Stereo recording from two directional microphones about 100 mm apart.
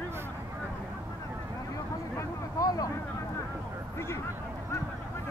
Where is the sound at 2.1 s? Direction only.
35° left (ahead or behind).